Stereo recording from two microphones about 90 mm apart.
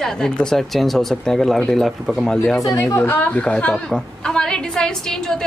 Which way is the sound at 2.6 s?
40° left (ahead or behind).